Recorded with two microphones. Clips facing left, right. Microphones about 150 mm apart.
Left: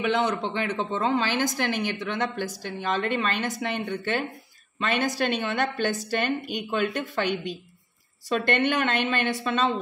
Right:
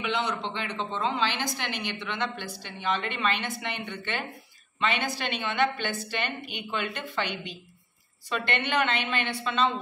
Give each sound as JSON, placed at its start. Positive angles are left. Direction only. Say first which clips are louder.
{"t": 0.0, "sound": "a woman's voice", "louder": "left 5 dB", "side_deg": 50}